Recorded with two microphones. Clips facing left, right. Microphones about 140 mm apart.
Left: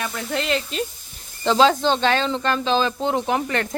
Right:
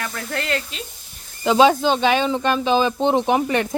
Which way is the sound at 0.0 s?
15° left (ahead or behind).